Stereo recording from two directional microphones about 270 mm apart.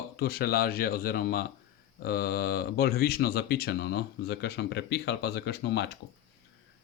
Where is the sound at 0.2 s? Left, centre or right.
Left.